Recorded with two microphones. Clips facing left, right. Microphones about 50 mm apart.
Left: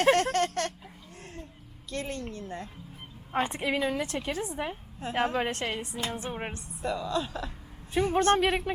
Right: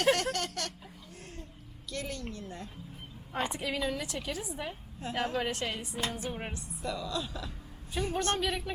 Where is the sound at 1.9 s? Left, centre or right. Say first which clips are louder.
Left 3 dB; left.